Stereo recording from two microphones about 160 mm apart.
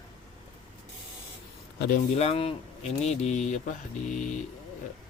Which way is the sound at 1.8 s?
60° left (ahead or behind).